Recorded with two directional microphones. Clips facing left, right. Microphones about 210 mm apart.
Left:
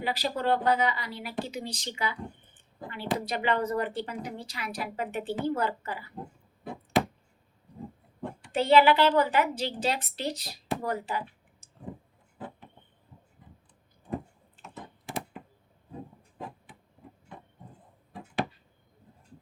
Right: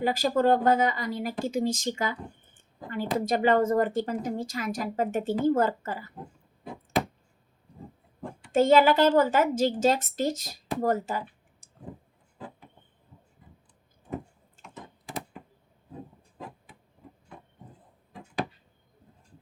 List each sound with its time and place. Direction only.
0.0 s a woman's voice: 45° right (ahead or behind)
8.5 s a woman's voice: 45° right (ahead or behind)
11.6 s tick-tock: centre (ahead or behind)